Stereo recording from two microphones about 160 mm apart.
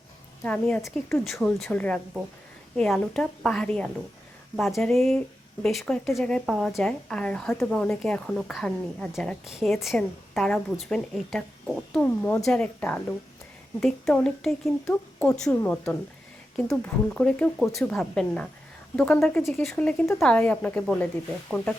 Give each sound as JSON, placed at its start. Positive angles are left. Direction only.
{"t": 0.4, "sound": "a woman's voice", "side_deg": 5}
{"t": 14.8, "sound": "speech", "side_deg": 15}
{"t": 15.4, "sound": "a woman's voice", "side_deg": 5}